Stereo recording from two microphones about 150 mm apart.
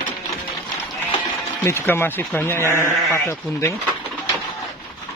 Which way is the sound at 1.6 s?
15° left (ahead or behind).